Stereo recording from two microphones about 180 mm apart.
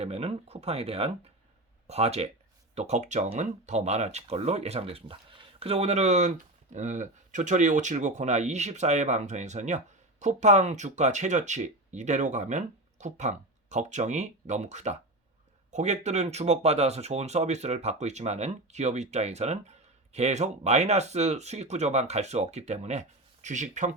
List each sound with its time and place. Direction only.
0.0 s speech: 35° right (ahead or behind)